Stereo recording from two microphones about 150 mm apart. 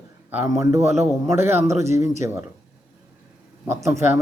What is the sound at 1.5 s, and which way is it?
Speech, 45° right (ahead or behind).